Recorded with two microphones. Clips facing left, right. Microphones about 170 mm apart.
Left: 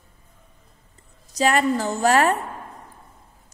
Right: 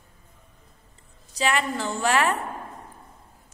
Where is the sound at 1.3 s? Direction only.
40° left (ahead or behind).